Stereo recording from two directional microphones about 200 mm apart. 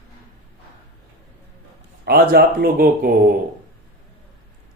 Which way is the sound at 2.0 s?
50° right (ahead or behind).